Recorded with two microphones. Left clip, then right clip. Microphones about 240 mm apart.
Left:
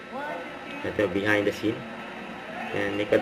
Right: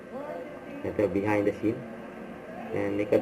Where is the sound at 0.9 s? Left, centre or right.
Centre.